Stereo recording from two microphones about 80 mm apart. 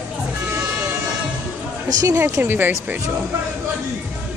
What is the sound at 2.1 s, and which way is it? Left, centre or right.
Speech, right.